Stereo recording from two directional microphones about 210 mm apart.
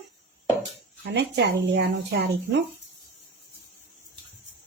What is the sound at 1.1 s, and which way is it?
Speech, 55° right (ahead or behind).